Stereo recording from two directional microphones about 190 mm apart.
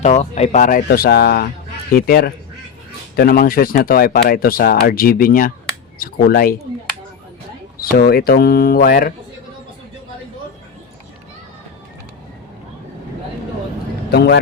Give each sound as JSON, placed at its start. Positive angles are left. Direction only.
{"t": 0.0, "sound": "speech", "side_deg": 35}
{"t": 7.8, "sound": "speech", "side_deg": 50}
{"t": 14.1, "sound": "speech", "side_deg": 60}